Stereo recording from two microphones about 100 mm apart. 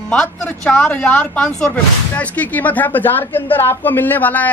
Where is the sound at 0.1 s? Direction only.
10° left (ahead or behind).